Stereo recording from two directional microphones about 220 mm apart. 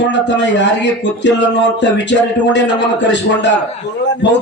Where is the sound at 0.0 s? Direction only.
55° left (ahead or behind).